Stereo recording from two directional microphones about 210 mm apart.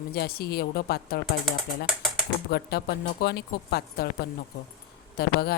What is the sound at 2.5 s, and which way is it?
Speech, 50° left (ahead or behind).